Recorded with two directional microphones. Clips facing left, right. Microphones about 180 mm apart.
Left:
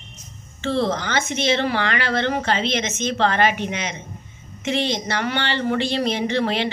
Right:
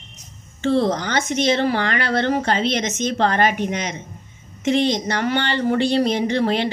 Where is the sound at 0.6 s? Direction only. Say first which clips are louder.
Right 3 dB; 45° right (ahead or behind).